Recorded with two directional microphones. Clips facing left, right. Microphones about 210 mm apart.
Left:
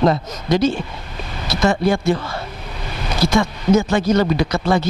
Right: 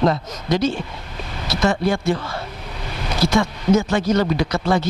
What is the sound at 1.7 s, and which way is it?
Speech, 10° left (ahead or behind).